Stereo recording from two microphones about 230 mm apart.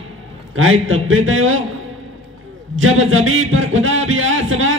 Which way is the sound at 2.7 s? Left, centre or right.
Right.